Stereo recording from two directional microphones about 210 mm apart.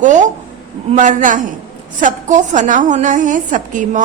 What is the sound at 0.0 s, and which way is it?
A woman's voice, 35° right (ahead or behind).